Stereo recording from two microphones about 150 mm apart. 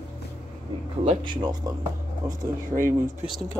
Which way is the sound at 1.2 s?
30° right (ahead or behind).